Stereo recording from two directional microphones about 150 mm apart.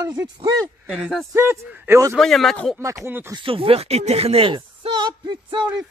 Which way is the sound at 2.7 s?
20° right (ahead or behind).